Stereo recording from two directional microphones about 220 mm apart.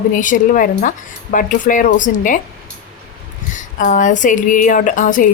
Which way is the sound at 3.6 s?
35° left (ahead or behind).